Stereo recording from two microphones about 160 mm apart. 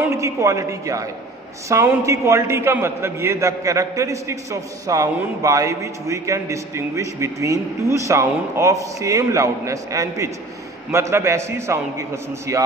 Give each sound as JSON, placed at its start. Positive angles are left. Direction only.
{"t": 0.0, "sound": "a man's voice", "side_deg": -20}